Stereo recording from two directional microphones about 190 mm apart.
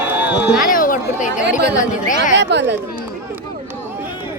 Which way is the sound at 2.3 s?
65° right (ahead or behind).